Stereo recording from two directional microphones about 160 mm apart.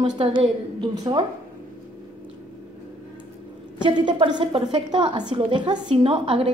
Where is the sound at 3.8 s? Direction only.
30° right (ahead or behind).